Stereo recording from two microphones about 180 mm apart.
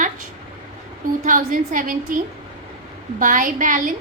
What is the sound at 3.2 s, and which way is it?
Speech, 45° right (ahead or behind).